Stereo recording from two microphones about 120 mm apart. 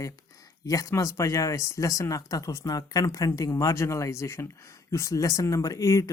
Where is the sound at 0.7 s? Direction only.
25° left (ahead or behind).